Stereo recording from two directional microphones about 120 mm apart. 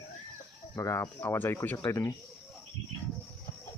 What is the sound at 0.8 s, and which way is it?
Speech, 25° left (ahead or behind).